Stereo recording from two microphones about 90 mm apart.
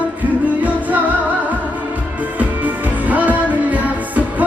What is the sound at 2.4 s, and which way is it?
Music, 15° right (ahead or behind).